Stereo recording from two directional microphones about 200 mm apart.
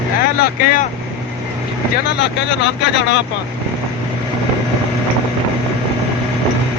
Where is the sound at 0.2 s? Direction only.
45° left (ahead or behind).